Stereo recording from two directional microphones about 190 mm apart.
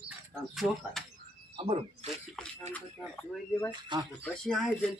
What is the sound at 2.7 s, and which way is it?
Speech, 10° left (ahead or behind).